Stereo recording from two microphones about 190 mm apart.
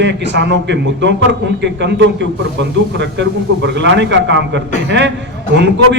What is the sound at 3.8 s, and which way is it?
A man's voice, 70° right (ahead or behind).